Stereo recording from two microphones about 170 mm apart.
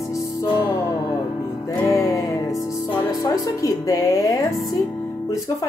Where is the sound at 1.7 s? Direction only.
20° left (ahead or behind).